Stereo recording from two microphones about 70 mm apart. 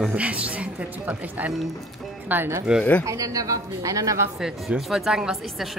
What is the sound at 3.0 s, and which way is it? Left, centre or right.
A woman's voice, right.